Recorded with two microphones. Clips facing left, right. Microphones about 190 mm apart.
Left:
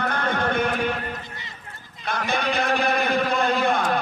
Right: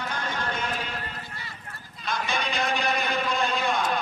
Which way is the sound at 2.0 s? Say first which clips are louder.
Left 4 dB; 60° left (ahead or behind).